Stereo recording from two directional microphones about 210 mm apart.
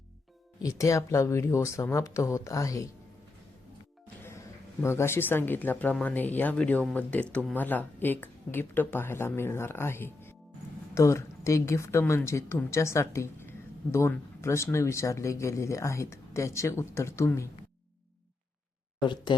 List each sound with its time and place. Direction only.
0.6 s speech: 15° left (ahead or behind)
4.2 s speech: 10° left (ahead or behind)
18.9 s speech: 20° left (ahead or behind)